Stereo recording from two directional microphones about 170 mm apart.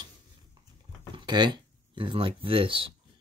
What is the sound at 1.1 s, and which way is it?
Speech, 25° right (ahead or behind).